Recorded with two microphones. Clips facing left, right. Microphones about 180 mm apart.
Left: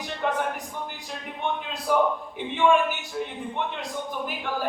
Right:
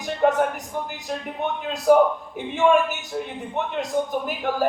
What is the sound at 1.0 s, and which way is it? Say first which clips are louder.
A man's voice: right 2 dB; 45° right (ahead or behind).